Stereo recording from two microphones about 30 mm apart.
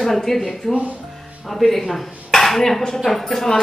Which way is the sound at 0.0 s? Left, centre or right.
Centre.